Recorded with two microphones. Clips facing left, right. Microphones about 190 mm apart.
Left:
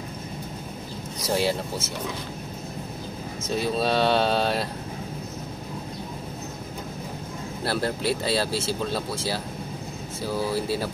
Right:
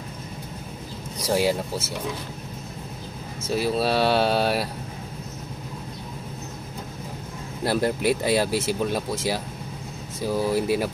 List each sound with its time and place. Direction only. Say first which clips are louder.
1.2 s speech: right 2 dB; 10° right (ahead or behind)
3.4 s speech: right 2 dB; 5° right (ahead or behind)
7.6 s speech: right 4 dB; 15° right (ahead or behind)